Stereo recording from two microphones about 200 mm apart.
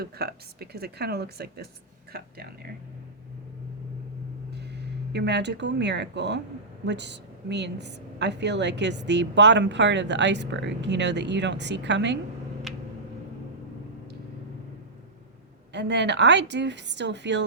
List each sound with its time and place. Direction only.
0.0 s speech: 50° right (ahead or behind)
5.1 s a woman's voice: 60° right (ahead or behind)
12.7 s tick-tock: centre (ahead or behind)
15.7 s a woman's voice: 60° right (ahead or behind)